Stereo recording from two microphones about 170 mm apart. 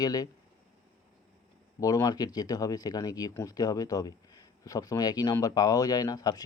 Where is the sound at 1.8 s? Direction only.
20° left (ahead or behind).